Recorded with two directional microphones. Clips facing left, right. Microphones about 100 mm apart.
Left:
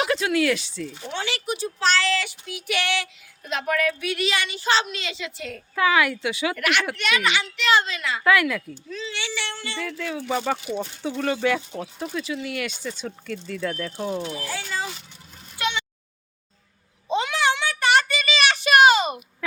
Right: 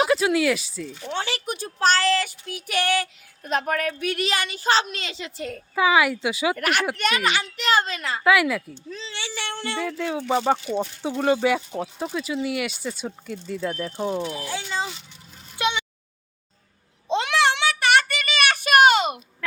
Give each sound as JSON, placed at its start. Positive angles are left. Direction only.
{"t": 0.0, "sound": "speech", "side_deg": -10}
{"t": 1.1, "sound": "a woman's voice", "side_deg": -40}
{"t": 5.7, "sound": "speech", "side_deg": -15}
{"t": 6.6, "sound": "a woman's voice", "side_deg": -40}
{"t": 8.2, "sound": "speech", "side_deg": -15}
{"t": 8.9, "sound": "a woman's voice", "side_deg": -30}
{"t": 9.7, "sound": "speech", "side_deg": -25}
{"t": 15.5, "sound": "a sound", "side_deg": -15}
{"t": 17.1, "sound": "child singing", "side_deg": -75}